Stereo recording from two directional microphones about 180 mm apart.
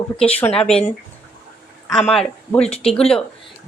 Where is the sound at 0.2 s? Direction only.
10° left (ahead or behind).